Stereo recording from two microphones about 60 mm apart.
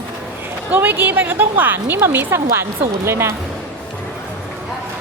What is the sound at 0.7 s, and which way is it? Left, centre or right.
A woman's voice, right.